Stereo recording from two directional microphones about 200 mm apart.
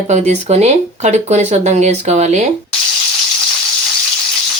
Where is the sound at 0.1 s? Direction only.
35° right (ahead or behind).